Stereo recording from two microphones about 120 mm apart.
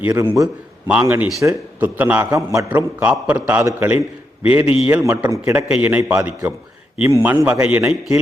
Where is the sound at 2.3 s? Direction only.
25° right (ahead or behind).